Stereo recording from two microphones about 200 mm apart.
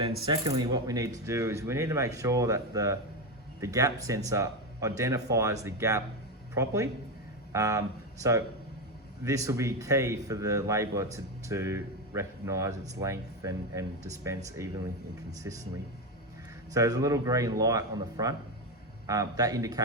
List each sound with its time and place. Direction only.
0.3 s a man's voice: 20° right (ahead or behind)
16.7 s a man's voice: 15° right (ahead or behind)